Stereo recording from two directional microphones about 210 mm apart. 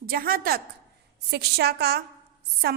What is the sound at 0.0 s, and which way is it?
A woman's voice, 45° right (ahead or behind).